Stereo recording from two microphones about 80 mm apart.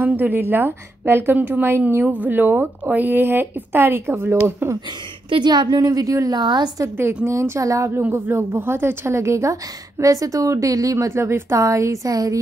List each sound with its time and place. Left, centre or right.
0.0 s a woman's voice: right
5.3 s a woman's voice: right
5.8 s speech: right
6.3 s a woman's voice: right
7.2 s a woman's voice: right
7.9 s a woman's voice: right